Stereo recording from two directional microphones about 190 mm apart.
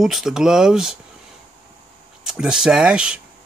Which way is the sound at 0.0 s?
Centre (ahead or behind).